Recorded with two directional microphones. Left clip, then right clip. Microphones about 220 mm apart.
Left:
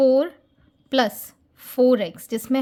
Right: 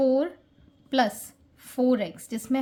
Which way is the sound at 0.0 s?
40° left (ahead or behind).